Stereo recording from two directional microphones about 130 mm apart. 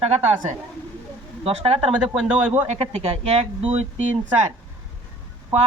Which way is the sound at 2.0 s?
10° right (ahead or behind).